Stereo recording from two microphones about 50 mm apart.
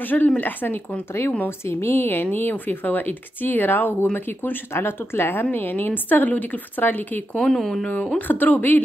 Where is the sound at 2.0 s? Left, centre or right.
Left.